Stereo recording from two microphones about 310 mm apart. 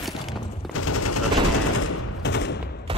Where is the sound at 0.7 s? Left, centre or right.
Left.